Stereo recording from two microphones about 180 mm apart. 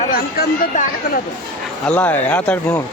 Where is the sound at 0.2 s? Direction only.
55° left (ahead or behind).